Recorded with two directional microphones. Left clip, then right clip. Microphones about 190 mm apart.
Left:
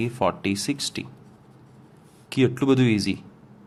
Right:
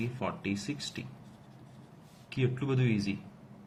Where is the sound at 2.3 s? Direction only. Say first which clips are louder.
Left 13 dB; 60° left (ahead or behind).